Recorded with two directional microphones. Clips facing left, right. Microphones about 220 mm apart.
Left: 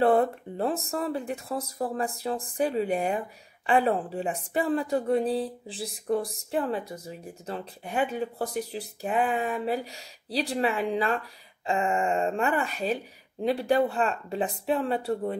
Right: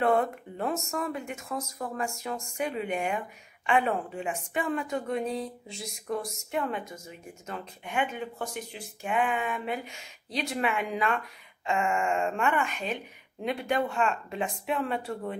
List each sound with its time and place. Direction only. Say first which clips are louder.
0.0 s speech: left 4 dB; 35° left (ahead or behind)